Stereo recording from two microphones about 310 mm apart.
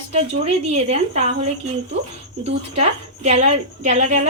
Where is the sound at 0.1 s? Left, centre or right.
Right.